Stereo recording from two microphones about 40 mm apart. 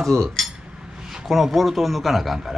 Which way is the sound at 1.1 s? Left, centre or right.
Centre.